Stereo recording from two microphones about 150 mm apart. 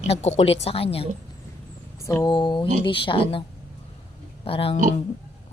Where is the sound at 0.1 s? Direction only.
45° left (ahead or behind).